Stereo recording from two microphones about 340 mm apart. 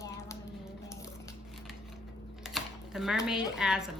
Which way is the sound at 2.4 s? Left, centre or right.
Centre.